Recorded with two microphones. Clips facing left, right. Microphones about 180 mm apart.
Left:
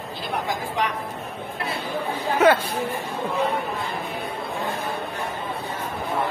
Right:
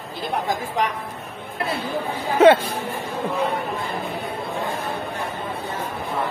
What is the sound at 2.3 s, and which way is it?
Speech, 25° right (ahead or behind).